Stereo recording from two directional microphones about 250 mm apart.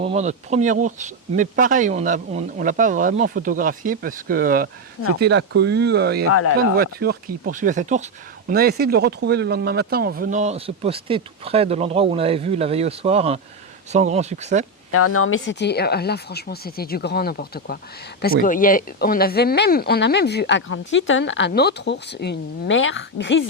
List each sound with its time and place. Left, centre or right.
0.0 s speech: right
14.9 s speech: left